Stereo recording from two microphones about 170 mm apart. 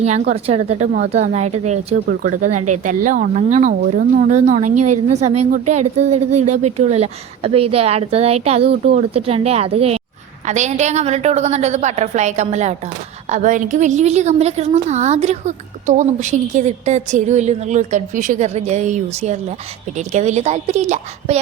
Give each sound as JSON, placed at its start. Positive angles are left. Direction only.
{"t": 0.0, "sound": "a woman's voice", "side_deg": -40}